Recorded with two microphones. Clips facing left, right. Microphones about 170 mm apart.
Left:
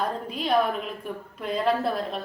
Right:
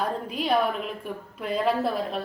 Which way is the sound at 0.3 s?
5° right (ahead or behind).